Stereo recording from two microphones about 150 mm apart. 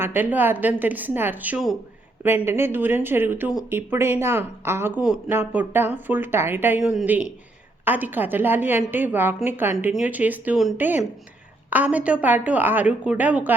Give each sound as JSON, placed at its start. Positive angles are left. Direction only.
{"t": 0.0, "sound": "a woman's voice", "side_deg": -15}